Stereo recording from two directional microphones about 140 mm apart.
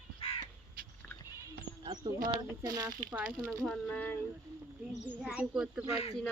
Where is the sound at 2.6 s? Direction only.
25° right (ahead or behind).